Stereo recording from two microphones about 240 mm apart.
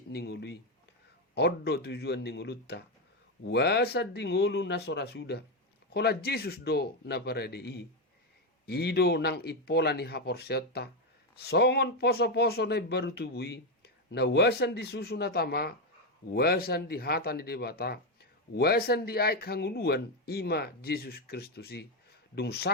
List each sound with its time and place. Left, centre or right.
0.1 s speech: left